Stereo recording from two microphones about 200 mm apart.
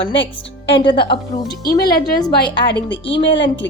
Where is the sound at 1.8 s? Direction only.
50° left (ahead or behind).